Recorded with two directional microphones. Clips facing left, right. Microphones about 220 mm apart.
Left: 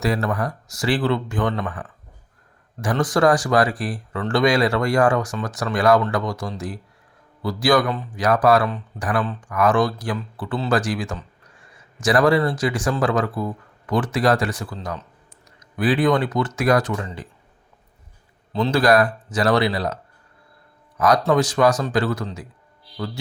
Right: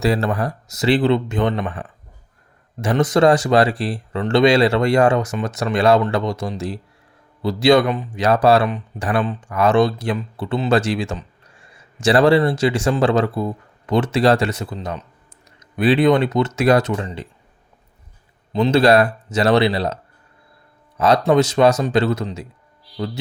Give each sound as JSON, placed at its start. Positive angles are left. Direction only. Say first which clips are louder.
{"t": 0.0, "sound": "speech", "louder": "right 3 dB", "side_deg": -30}
{"t": 18.5, "sound": "speech", "louder": "right 3 dB", "side_deg": -20}
{"t": 21.0, "sound": "speech", "louder": "right 3 dB", "side_deg": -25}